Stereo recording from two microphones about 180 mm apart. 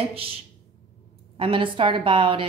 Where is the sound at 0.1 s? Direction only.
30° right (ahead or behind).